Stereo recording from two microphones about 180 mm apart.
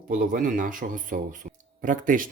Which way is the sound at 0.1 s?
50° right (ahead or behind).